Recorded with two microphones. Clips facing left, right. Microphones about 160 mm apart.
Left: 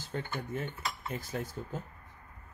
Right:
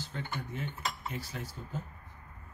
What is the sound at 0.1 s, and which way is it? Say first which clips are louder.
Cutlery: left 6 dB; 50° left (ahead or behind).